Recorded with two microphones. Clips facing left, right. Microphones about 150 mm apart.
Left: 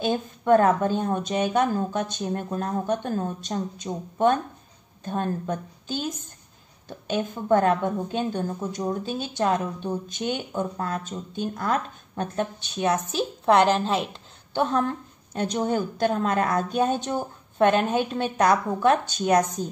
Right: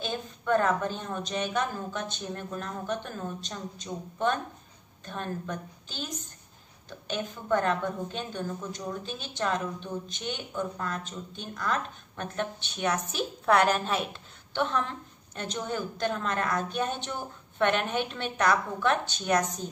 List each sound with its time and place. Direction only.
0.0 s speech: 45° left (ahead or behind)
7.4 s a woman's voice: 45° left (ahead or behind)